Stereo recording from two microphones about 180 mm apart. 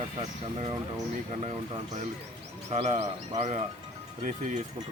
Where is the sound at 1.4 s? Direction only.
35° right (ahead or behind).